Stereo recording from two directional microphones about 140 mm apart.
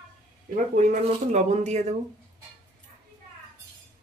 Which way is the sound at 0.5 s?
60° right (ahead or behind).